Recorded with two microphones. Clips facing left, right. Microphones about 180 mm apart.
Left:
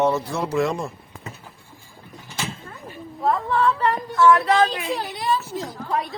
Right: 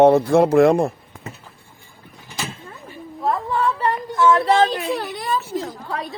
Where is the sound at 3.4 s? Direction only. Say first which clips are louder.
Even; 15° right (ahead or behind).